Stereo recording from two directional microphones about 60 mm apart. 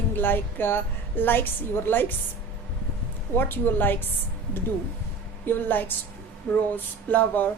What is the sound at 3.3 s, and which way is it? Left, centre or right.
Speech, left.